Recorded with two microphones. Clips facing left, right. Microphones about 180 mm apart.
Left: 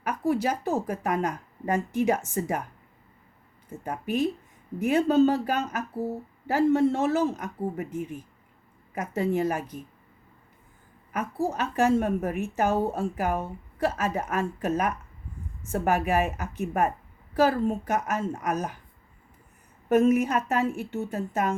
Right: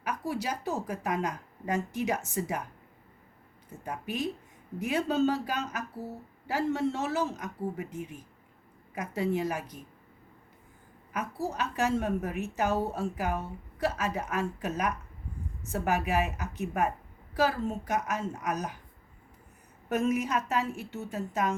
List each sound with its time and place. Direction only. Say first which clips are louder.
0.0 s a woman's voice: left 7 dB; 50° left (ahead or behind)
3.7 s a woman's voice: left 6 dB; 50° left (ahead or behind)
11.1 s a woman's voice: left 5 dB; 50° left (ahead or behind)
19.9 s a woman's voice: left 7 dB; 50° left (ahead or behind)